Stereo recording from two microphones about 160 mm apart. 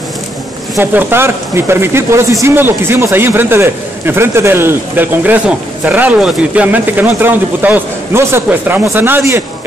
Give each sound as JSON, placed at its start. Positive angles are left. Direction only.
{"t": 0.7, "sound": "speech", "side_deg": -15}